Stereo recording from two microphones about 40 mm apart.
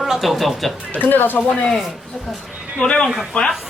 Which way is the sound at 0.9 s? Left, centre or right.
Left.